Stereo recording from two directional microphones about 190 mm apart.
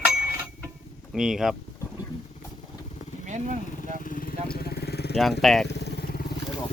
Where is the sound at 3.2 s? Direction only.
40° right (ahead or behind).